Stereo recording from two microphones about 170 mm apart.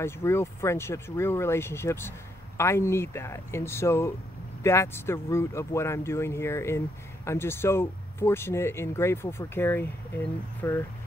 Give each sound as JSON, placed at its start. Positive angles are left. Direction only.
{"t": 0.0, "sound": "speech", "side_deg": 15}